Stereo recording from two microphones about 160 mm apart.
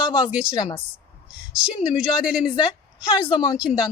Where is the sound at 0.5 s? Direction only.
30° left (ahead or behind).